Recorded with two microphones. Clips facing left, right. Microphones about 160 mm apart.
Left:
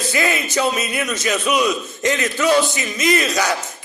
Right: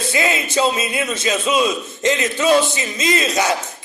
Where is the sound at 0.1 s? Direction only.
20° right (ahead or behind).